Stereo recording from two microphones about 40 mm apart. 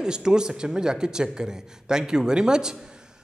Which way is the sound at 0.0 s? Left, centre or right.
Centre.